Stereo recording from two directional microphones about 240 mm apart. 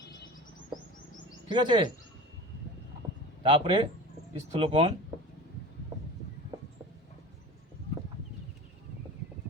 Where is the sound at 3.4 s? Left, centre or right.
Right.